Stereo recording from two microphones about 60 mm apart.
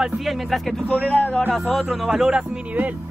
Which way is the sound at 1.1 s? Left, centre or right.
Left.